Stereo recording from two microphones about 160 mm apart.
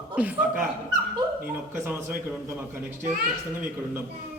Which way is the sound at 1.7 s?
10° right (ahead or behind).